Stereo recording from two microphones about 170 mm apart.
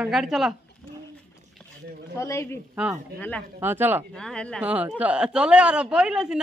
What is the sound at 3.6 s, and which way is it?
Speech, 10° right (ahead or behind).